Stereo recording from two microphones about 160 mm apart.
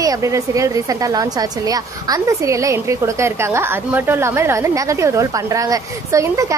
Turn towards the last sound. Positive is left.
turn(degrees=-20)  # may be behind; listen again after turning